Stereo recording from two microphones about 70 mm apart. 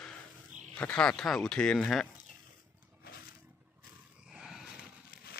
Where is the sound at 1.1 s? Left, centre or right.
Centre.